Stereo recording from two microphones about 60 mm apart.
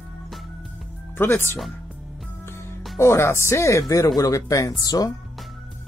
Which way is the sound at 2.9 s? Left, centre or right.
Left.